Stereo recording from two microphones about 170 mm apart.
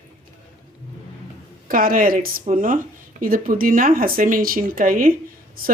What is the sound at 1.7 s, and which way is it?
Speech, 55° right (ahead or behind).